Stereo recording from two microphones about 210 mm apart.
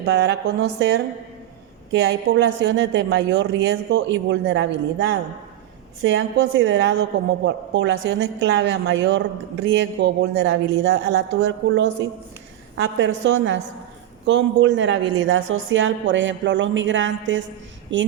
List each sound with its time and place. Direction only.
0.0 s speech: 55° right (ahead or behind)
15.2 s speech: 80° right; by 18.0 s 60° right (ahead or behind)